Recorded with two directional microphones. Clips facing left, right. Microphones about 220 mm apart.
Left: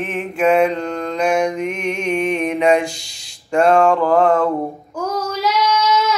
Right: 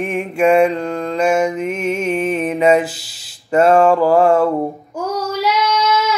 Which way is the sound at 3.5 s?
5° right (ahead or behind).